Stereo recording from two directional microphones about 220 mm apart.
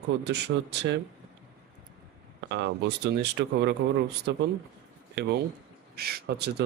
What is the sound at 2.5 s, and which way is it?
Speech, 50° right (ahead or behind).